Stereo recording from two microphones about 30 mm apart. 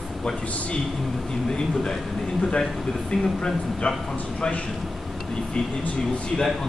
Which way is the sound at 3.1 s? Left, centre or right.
Left.